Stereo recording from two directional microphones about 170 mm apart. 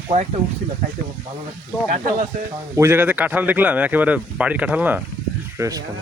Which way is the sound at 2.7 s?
15° right (ahead or behind).